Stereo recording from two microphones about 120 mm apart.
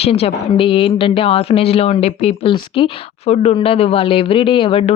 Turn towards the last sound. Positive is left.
turn(degrees=50)  # may be behind; listen again after turning